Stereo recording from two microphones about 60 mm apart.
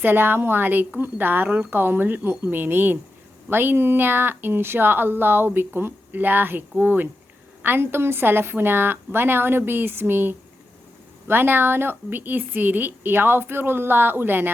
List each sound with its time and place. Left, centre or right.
0.0 s speech: right